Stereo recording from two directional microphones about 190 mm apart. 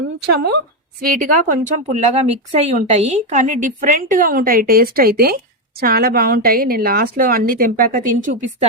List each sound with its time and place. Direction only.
0.3 s speech: 60° right (ahead or behind)
1.0 s speech: 45° right (ahead or behind)